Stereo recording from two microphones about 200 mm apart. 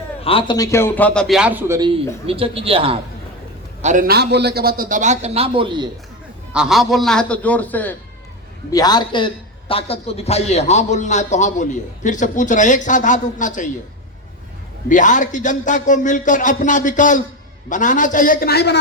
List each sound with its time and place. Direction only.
0.3 s a man's voice: 25° left (ahead or behind); by 1.9 s 15° right (ahead or behind)
2.2 s a man's voice: 30° right (ahead or behind)
3.8 s a man's voice: 40° right (ahead or behind)
6.5 s a man's voice: 5° right (ahead or behind)
8.7 s a man's voice: 20° left (ahead or behind); by 13.7 s 40° left (ahead or behind)
14.8 s a man's voice: 40° left (ahead or behind); by 18.8 s 55° left (ahead or behind)